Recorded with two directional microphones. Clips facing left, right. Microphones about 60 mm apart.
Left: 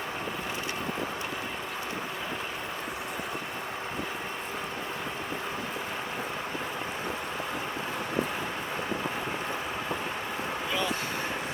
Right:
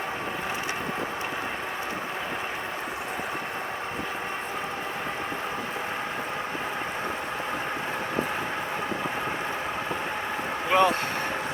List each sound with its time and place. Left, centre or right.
10.7 s vehicle: right